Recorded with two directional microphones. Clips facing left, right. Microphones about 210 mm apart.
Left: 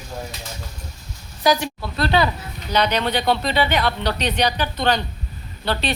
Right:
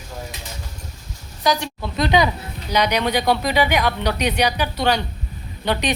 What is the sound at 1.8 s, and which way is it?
Speech, 20° right (ahead or behind).